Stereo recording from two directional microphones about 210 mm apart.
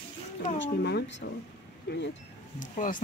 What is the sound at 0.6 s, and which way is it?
Speech, 55° left (ahead or behind).